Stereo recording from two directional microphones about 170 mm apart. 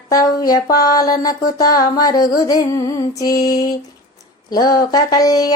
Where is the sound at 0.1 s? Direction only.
20° left (ahead or behind).